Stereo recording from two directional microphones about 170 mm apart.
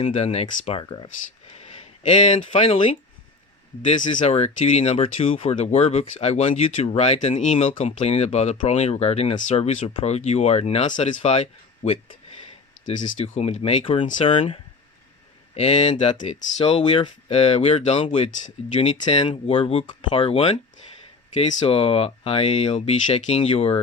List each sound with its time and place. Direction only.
0.0 s speech: 40° left (ahead or behind)
13.1 s speech: 35° left (ahead or behind)